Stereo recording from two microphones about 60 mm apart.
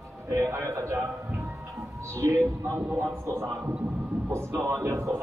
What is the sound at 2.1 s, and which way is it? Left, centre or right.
Speech, right.